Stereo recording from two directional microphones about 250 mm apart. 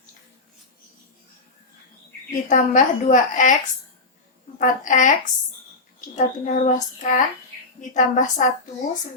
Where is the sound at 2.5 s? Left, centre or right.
Left.